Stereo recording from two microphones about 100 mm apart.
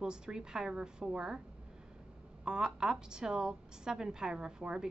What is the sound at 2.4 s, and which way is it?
A woman's voice, 5° right (ahead or behind).